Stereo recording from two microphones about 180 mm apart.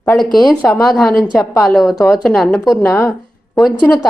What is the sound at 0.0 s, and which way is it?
A woman's voice, 5° left (ahead or behind).